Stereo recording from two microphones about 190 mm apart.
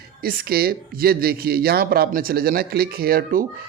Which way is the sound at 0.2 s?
55° right (ahead or behind).